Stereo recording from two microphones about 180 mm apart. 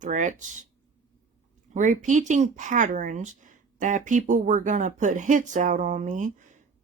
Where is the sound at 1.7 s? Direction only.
45° right (ahead or behind).